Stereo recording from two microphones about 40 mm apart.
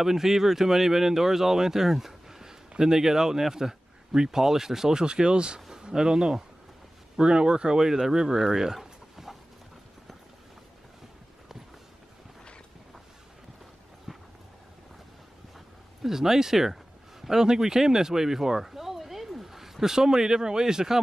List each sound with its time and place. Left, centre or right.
0.0 s speech: centre
8.7 s dog: centre
14.1 s a sound: centre
16.0 s speech: centre